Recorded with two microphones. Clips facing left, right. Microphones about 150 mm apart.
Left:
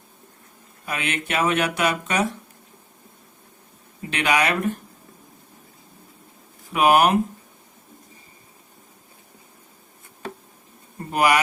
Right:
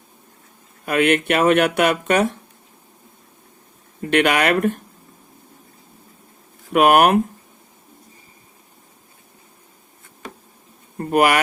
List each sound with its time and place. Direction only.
0.9 s speech: 60° right (ahead or behind)
4.1 s speech: 60° right (ahead or behind)
6.7 s speech: 60° right (ahead or behind)
10.9 s a sound: 55° right (ahead or behind)